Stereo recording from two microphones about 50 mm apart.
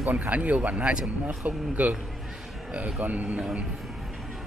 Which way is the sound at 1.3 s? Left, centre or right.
Right.